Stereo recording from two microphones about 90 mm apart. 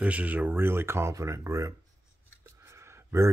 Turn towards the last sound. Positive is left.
turn(degrees=-35)  # may be behind; listen again after turning